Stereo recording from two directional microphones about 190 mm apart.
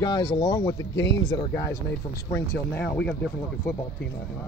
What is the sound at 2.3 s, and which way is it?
Speech, 15° left (ahead or behind).